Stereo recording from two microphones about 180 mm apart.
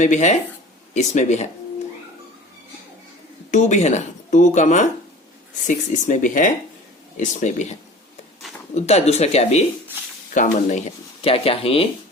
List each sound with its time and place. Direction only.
0.0 s speech: 40° left (ahead or behind)
3.5 s speech: 40° left (ahead or behind)
11.2 s speech: 30° left (ahead or behind)